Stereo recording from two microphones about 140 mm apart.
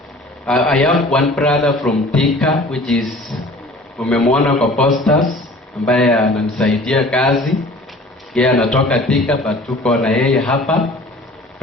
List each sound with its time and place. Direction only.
0.4 s a man's voice: 5° left (ahead or behind)